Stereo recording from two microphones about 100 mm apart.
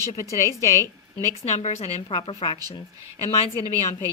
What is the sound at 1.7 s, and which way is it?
Speech, 90° left.